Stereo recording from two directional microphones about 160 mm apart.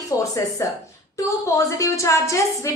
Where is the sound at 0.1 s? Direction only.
20° left (ahead or behind).